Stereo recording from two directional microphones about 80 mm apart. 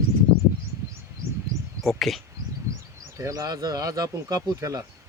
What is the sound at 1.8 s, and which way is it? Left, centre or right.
Bird, centre.